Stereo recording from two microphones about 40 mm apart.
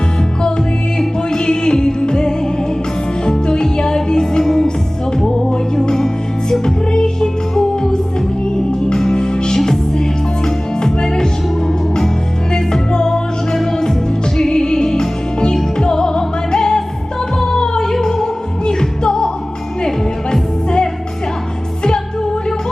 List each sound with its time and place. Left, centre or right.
0.9 s music: centre
12.5 s music: centre
20.3 s music: centre